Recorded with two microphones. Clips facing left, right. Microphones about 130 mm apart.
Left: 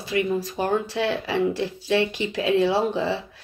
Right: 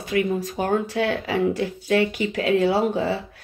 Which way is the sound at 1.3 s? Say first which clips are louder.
Right 1 dB; 15° right (ahead or behind).